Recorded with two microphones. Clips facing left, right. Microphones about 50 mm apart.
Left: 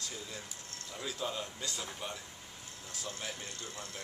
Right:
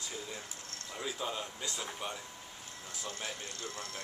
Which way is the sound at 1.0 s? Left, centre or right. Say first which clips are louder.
Even; centre.